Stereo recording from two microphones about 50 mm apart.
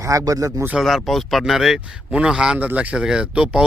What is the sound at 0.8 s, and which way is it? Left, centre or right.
Speech, centre.